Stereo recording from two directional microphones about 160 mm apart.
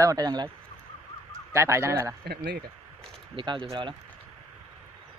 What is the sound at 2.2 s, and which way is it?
Speech, 90° right.